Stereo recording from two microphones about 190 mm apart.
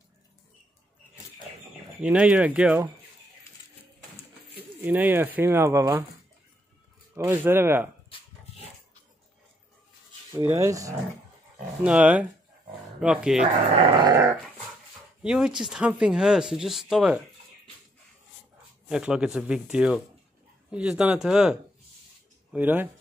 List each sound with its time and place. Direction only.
2.0 s speech: 5° right (ahead or behind)
4.7 s speech: 10° right (ahead or behind)
7.2 s speech: 10° right (ahead or behind)
10.3 s speech: 15° right (ahead or behind)
11.8 s speech: 5° right (ahead or behind)
13.7 s dog: 30° right (ahead or behind)
15.2 s speech: 5° right (ahead or behind)
18.9 s speech: 5° right (ahead or behind)